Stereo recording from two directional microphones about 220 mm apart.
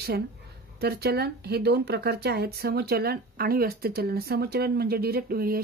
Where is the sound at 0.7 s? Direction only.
45° right (ahead or behind).